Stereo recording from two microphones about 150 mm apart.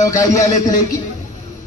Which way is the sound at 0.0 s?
20° left (ahead or behind).